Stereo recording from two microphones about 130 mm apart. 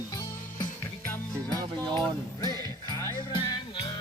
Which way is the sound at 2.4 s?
25° left (ahead or behind).